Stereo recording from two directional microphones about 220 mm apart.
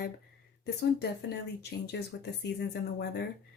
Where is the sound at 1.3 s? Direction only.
50° left (ahead or behind).